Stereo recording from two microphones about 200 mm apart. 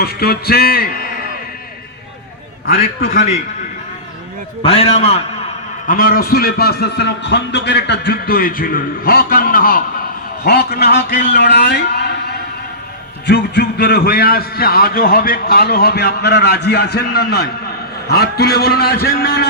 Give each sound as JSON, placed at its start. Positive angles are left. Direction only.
{"t": 0.0, "sound": "a man's voice", "side_deg": 50}
{"t": 2.6, "sound": "a man's voice", "side_deg": 45}
{"t": 4.6, "sound": "a man's voice", "side_deg": 30}
{"t": 5.9, "sound": "a man's voice", "side_deg": 45}